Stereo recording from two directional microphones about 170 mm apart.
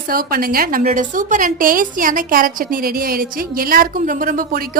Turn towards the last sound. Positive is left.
turn(degrees=-55)  # may be behind; listen again after turning